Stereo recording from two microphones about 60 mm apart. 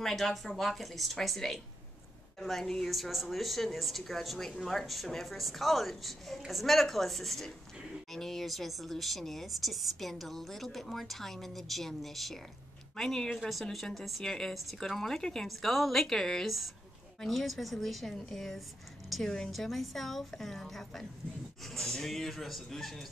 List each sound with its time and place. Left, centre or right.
0.0 s a woman's voice: centre